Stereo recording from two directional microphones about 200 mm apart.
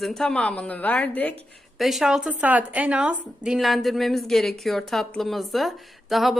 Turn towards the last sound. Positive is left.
turn(degrees=0)  # may be behind; listen again after turning